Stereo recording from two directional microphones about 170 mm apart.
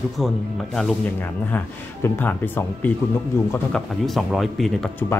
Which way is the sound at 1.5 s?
10° left (ahead or behind).